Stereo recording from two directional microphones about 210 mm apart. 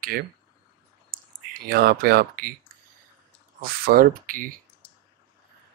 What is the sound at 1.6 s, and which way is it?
Speech, 45° right (ahead or behind).